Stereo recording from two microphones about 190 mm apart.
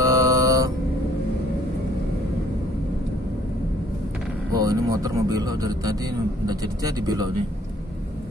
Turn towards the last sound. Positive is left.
turn(degrees=-20)  # may be behind; listen again after turning